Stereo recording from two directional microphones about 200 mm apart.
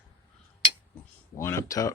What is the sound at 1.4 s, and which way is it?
Speech, 15° left (ahead or behind).